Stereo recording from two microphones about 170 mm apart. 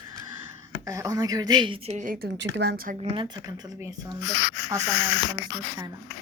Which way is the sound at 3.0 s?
30° right (ahead or behind).